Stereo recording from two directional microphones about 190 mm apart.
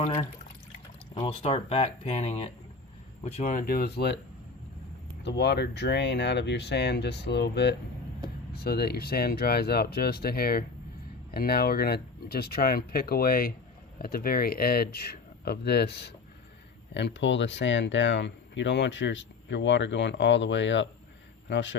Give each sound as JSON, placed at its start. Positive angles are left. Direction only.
{"t": 0.0, "sound": "speech", "side_deg": 30}
{"t": 5.2, "sound": "speech", "side_deg": 60}